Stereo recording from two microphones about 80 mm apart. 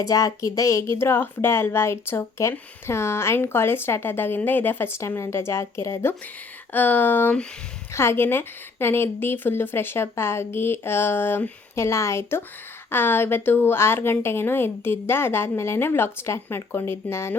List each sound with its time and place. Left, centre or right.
0.0 s a woman's voice: left